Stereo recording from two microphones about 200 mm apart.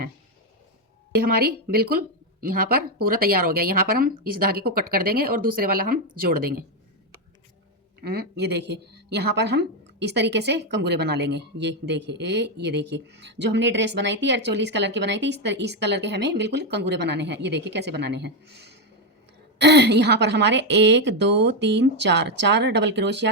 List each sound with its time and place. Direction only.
1.3 s a woman's voice: 50° right (ahead or behind)
8.0 s speech: 55° right (ahead or behind)